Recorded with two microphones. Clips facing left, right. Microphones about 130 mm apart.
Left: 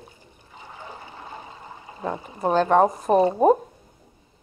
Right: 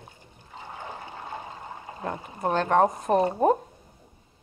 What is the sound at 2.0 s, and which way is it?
Speech, 10° left (ahead or behind).